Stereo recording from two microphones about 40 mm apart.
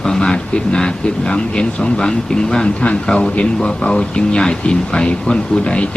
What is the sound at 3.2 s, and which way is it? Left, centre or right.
Speech, left.